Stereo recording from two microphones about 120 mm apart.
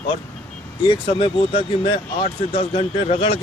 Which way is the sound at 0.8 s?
45° left (ahead or behind).